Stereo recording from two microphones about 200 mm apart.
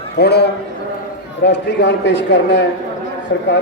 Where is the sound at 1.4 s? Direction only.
60° left (ahead or behind).